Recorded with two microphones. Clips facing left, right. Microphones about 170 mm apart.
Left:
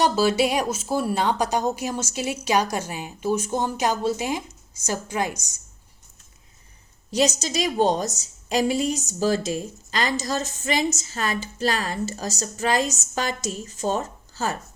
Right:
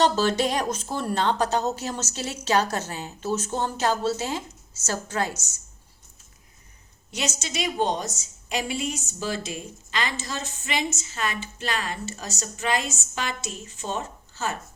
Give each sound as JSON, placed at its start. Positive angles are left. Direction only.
{"t": 0.0, "sound": "a woman's voice", "side_deg": 10}
{"t": 7.1, "sound": "a woman's voice", "side_deg": 35}